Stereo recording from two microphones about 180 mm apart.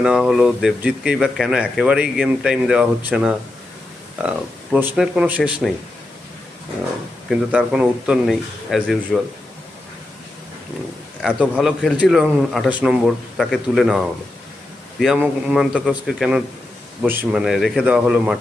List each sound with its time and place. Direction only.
0.0 s a man's voice: 5° right (ahead or behind)
7.3 s a man's voice: 5° right (ahead or behind)
11.2 s a man's voice: 5° right (ahead or behind)